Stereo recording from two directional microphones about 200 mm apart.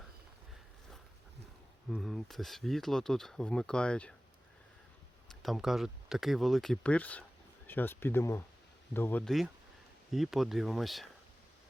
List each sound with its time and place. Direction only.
1.9 s speech: centre (ahead or behind)
5.3 s speech: centre (ahead or behind)